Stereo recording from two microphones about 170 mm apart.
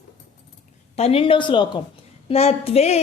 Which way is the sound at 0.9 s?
35° left (ahead or behind).